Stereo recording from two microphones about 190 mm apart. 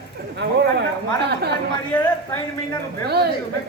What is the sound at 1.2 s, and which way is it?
Speech, 60° right (ahead or behind).